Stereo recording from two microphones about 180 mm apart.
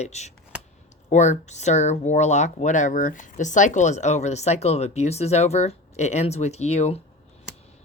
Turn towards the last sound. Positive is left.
turn(degrees=35)  # may be behind; listen again after turning